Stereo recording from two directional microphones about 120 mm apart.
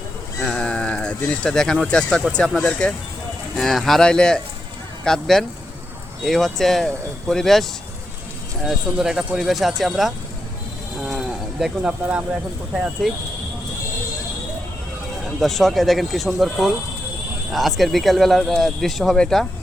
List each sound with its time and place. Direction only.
0.4 s speech: 5° left (ahead or behind)
15.4 s speech: centre (ahead or behind)